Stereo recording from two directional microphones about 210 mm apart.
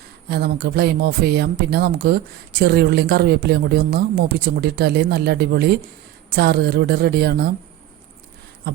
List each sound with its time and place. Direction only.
0.3 s speech: 50° right (ahead or behind)